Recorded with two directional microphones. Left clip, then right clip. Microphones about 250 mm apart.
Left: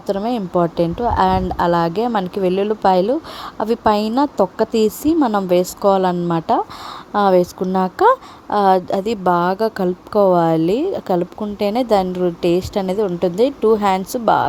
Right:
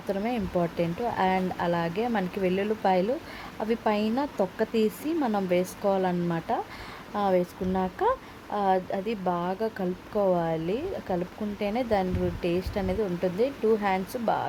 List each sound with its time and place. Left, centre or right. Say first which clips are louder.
0.1 s a woman's voice: left 10 dB; left